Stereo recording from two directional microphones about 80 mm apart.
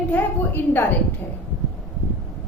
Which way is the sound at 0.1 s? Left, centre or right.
Left.